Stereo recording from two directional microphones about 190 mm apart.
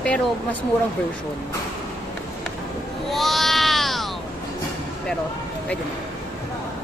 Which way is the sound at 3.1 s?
Centre (ahead or behind).